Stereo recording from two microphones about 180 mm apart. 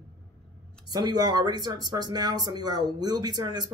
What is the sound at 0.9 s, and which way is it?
A man's voice, 20° right (ahead or behind).